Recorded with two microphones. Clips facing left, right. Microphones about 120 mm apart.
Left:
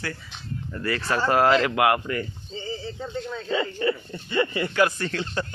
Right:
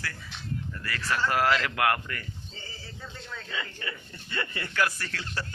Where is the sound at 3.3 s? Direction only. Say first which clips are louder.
Left 10 dB; 30° left (ahead or behind).